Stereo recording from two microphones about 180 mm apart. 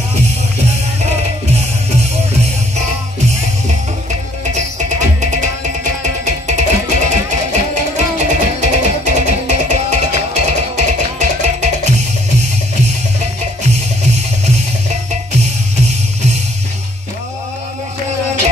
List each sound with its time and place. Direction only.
4.6 s music: 40° right (ahead or behind)